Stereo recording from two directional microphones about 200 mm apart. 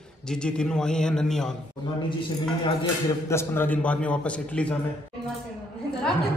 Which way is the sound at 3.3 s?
10° left (ahead or behind).